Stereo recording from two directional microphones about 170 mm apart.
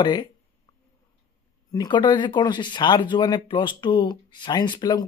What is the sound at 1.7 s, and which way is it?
Speech, 25° left (ahead or behind).